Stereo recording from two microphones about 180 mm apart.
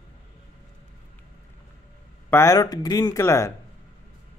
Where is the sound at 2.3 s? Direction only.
15° left (ahead or behind).